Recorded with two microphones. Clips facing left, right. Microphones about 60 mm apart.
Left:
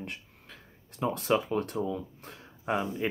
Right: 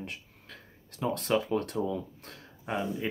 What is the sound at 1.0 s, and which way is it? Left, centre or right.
Speech, centre.